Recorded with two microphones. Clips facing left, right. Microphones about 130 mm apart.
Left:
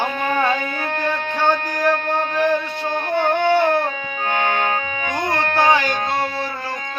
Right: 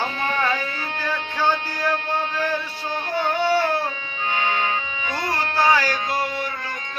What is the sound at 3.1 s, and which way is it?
Music, 55° left (ahead or behind).